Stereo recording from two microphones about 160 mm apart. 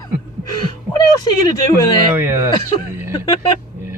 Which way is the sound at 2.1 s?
15° right (ahead or behind).